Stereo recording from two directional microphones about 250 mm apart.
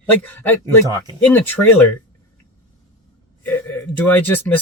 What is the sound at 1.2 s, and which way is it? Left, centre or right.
Speech, centre.